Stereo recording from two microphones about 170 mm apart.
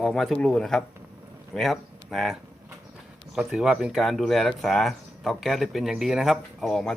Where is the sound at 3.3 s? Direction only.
5° right (ahead or behind).